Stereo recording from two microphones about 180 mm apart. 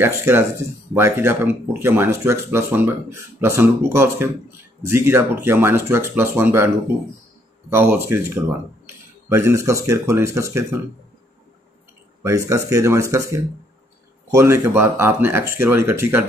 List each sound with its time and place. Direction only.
0.0 s speech: 15° right (ahead or behind)
7.7 s speech: 15° right (ahead or behind)
12.2 s speech: 15° right (ahead or behind)